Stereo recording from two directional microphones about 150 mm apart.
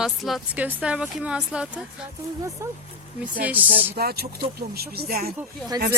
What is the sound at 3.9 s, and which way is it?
Speech, 90° right.